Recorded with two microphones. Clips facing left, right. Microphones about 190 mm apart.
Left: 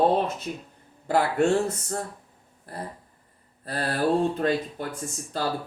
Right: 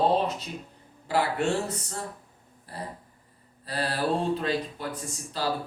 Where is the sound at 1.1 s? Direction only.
50° left (ahead or behind).